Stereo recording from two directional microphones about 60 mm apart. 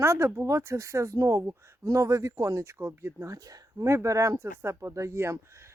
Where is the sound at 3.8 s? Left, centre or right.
Right.